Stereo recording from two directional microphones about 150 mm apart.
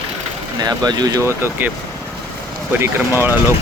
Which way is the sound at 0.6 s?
25° right (ahead or behind).